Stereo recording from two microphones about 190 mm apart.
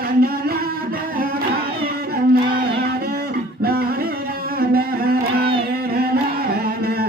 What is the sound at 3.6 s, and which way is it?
Music, 55° right (ahead or behind).